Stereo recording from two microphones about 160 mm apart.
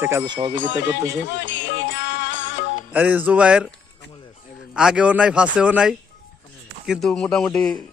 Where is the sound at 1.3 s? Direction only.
90° left.